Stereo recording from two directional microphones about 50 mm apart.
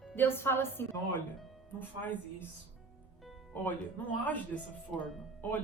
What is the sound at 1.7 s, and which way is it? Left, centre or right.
Speech, left.